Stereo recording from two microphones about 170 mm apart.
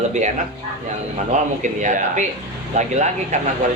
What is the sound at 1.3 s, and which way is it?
A man's voice, 45° right (ahead or behind).